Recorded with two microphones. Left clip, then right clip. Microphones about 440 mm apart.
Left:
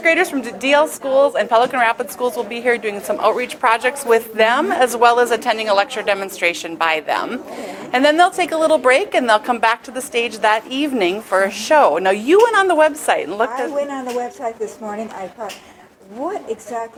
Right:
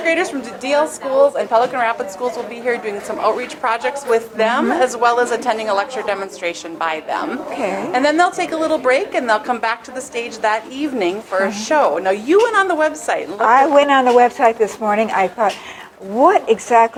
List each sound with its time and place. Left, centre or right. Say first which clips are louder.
0.0 s a woman's voice: left 2 dB; left
13.5 s a woman's voice: right 11 dB; right